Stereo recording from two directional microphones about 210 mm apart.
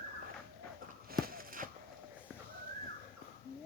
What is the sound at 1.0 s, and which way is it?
Walk, 45° right (ahead or behind).